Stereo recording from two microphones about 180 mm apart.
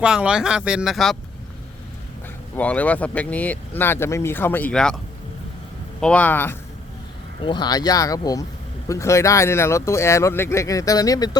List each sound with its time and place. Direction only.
0.0 s speech: 5° right (ahead or behind)
2.6 s speech: 10° left (ahead or behind)
6.0 s speech: 5° left (ahead or behind)
7.4 s speech: 25° left (ahead or behind)